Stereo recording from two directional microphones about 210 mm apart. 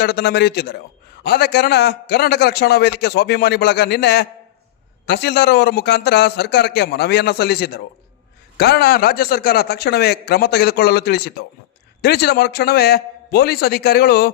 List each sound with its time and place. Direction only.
0.0 s a man's voice: 50° left (ahead or behind)